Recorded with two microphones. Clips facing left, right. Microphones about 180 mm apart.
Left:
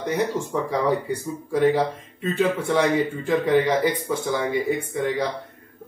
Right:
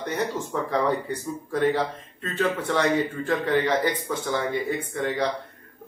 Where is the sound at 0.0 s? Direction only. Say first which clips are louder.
Left 4 dB; 10° left (ahead or behind).